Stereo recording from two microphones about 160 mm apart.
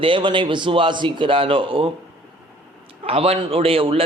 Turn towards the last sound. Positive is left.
turn(degrees=-35)  # may be behind; listen again after turning